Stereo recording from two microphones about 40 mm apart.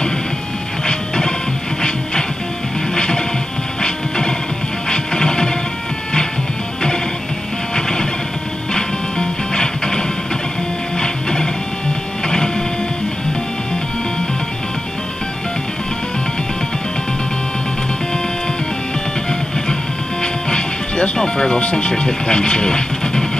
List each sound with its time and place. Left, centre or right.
0.8 s music: centre
2.9 s music: centre
7.7 s music: centre
12.3 s printer: centre
20.4 s music: left
21.6 s speech: left